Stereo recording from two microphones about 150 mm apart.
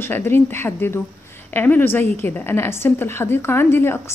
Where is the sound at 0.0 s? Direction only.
15° left (ahead or behind).